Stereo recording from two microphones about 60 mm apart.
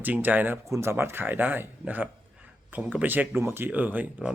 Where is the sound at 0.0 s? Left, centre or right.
Right.